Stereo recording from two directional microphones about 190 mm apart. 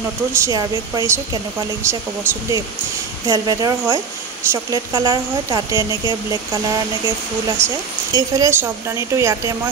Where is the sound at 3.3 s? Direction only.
20° right (ahead or behind).